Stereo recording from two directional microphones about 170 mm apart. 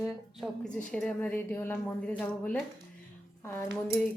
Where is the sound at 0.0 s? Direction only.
Centre (ahead or behind).